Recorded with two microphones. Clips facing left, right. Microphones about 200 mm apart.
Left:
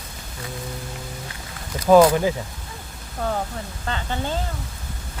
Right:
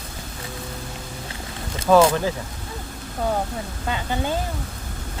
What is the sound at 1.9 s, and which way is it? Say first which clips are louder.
Speech: left 2 dB; 15° left (ahead or behind).